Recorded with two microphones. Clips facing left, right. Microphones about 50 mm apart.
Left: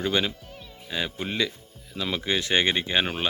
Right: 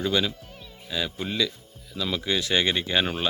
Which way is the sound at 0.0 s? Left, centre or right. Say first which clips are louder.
Even; left.